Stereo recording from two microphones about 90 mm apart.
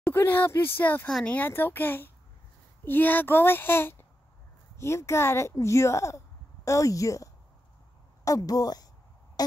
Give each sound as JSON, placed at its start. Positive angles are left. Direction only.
{"t": 0.0, "sound": "a child's voice", "side_deg": 25}
{"t": 1.0, "sound": "a child's voice", "side_deg": 10}
{"t": 8.3, "sound": "a woman's voice", "side_deg": 45}